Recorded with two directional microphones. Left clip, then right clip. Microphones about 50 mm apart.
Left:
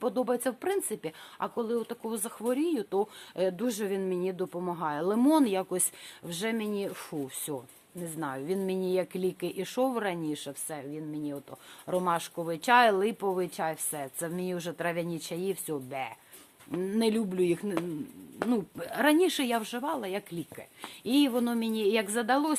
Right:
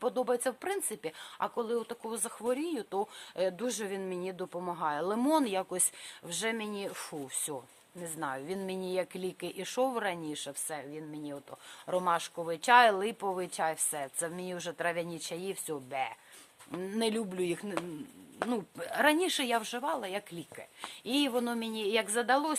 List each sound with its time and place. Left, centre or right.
0.0 s speech: centre
1.4 s speech: centre
1.9 s speech: centre
6.2 s speech: centre; by 7.2 s right
7.5 s speech: centre
10.7 s speech: right
11.9 s speech: centre
13.7 s speech: centre
14.2 s speech: centre
15.7 s speech: centre
17.2 s speech: right
18.4 s speech: right
20.8 s speech: centre